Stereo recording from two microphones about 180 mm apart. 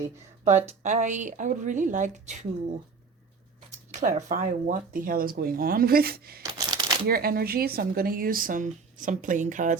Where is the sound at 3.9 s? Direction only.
45° right (ahead or behind).